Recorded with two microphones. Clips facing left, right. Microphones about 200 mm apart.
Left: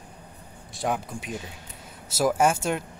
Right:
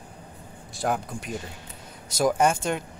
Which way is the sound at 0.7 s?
Centre (ahead or behind).